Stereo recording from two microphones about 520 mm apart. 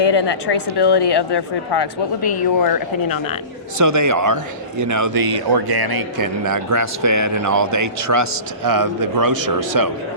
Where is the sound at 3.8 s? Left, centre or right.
Right.